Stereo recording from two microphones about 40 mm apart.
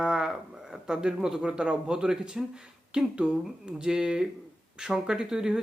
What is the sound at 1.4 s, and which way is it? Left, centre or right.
Speech, right.